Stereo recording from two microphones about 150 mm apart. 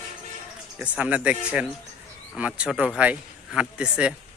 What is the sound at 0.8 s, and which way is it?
A man's voice, 10° right (ahead or behind).